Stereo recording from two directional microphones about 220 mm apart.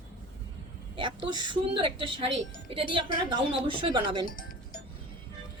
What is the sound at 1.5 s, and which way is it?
A woman's voice, 20° right (ahead or behind).